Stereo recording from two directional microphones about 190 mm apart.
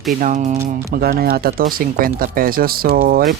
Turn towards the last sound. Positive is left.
turn(degrees=-50)  # may be behind; listen again after turning